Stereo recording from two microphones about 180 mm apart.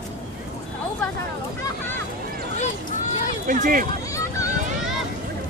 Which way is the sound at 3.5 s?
50° right (ahead or behind).